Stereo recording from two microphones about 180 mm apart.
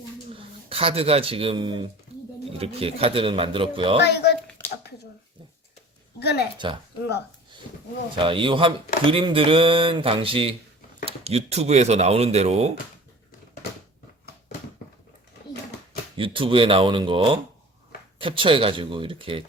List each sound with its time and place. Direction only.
0.7 s speech: 35° right (ahead or behind)
4.0 s speech: 65° left (ahead or behind)
6.1 s a sound: 65° left (ahead or behind)
6.6 s speech: 25° right (ahead or behind)
8.1 s speech: 30° right (ahead or behind)
16.1 s speech: 30° right (ahead or behind)